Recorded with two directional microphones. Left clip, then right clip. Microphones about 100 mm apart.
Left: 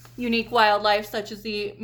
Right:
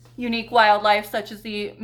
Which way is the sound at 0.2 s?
40° left (ahead or behind).